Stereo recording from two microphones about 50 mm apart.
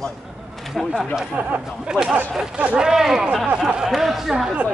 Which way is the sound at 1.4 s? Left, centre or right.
Right.